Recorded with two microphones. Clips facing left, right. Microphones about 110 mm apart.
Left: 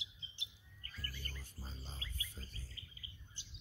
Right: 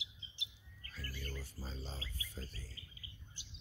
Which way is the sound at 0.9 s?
90° right.